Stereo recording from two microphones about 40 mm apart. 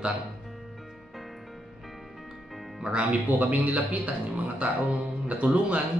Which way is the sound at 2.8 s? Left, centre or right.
Right.